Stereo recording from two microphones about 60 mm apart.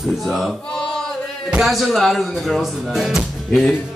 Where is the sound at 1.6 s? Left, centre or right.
Centre.